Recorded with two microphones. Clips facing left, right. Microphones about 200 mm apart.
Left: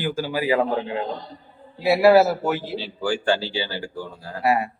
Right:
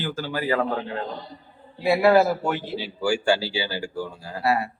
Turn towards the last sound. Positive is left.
turn(degrees=15)  # may be behind; listen again after turning